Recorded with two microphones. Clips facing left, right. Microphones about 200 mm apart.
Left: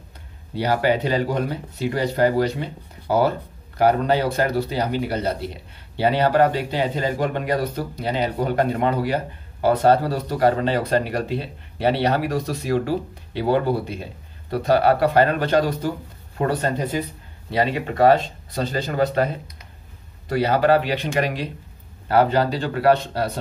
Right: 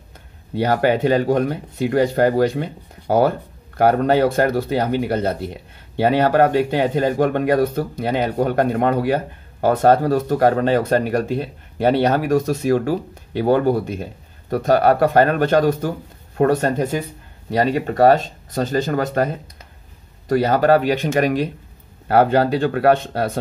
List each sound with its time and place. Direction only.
0.6 s speech: 50° right (ahead or behind)